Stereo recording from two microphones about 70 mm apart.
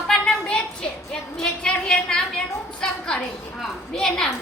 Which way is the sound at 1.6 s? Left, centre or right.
Centre.